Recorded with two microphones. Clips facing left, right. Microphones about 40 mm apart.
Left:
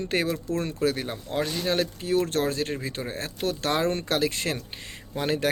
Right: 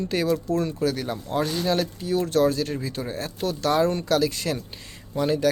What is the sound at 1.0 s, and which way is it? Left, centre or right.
Speech, left.